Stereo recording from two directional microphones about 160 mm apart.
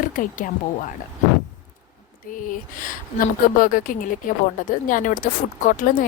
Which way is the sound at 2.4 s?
55° left (ahead or behind).